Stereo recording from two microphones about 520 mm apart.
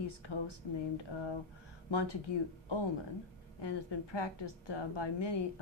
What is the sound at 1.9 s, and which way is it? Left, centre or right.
Speech, left.